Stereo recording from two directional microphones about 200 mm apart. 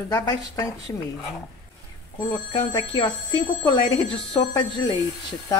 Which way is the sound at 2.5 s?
20° left (ahead or behind).